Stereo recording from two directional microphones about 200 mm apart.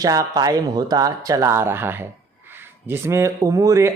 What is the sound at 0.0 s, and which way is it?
Speech, 20° right (ahead or behind).